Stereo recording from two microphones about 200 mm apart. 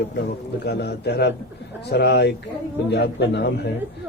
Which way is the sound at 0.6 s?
55° left (ahead or behind).